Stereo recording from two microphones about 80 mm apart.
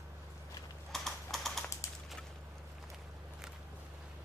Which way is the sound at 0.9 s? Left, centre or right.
Centre.